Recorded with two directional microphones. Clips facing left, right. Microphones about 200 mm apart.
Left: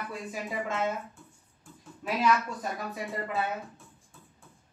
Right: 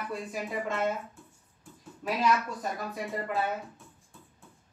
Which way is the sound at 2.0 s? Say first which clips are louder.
Left 1 dB; centre (ahead or behind).